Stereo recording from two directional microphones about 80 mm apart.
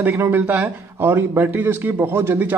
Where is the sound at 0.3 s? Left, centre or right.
Right.